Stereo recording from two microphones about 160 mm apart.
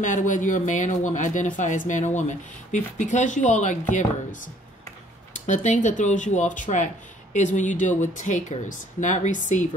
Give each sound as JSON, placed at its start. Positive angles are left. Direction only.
{"t": 0.0, "sound": "speech", "side_deg": 55}
{"t": 5.5, "sound": "speech", "side_deg": 50}